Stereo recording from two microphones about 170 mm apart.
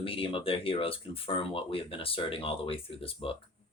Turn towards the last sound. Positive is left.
turn(degrees=30)  # may be behind; listen again after turning